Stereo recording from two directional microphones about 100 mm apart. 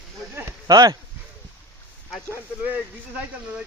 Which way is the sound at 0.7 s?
40° right (ahead or behind).